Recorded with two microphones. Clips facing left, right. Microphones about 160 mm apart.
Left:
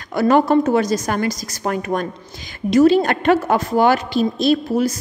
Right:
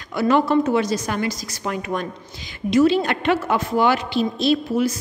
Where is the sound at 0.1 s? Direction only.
45° left (ahead or behind).